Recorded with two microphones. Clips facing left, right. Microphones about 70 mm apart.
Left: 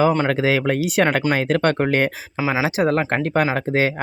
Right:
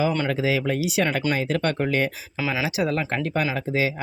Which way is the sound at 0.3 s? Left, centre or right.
Left.